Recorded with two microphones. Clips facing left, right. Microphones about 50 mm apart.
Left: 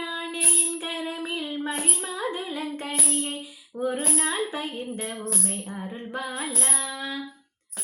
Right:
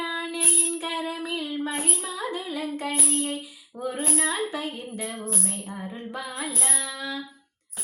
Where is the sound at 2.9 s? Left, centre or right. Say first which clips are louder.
Right 1 dB; centre.